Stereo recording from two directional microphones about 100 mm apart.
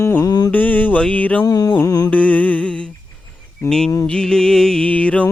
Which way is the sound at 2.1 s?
15° left (ahead or behind).